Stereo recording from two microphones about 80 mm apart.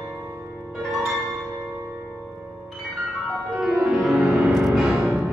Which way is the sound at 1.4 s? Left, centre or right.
Centre.